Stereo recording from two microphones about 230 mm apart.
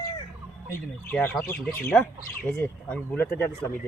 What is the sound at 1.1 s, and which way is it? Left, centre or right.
Speech, centre.